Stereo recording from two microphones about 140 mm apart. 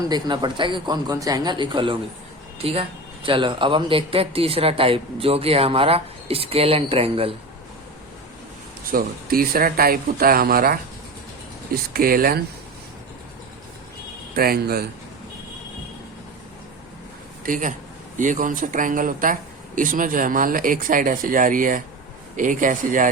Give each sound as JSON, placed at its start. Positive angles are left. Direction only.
{"t": 0.1, "sound": "speech", "side_deg": -30}
{"t": 8.9, "sound": "speech", "side_deg": -90}
{"t": 14.3, "sound": "speech", "side_deg": -90}
{"t": 17.4, "sound": "speech", "side_deg": -70}